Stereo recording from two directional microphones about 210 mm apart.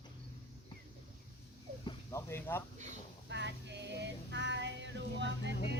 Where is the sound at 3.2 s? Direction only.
55° right (ahead or behind).